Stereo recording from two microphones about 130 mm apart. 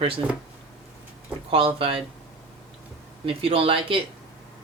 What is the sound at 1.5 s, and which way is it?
Speech, 45° right (ahead or behind).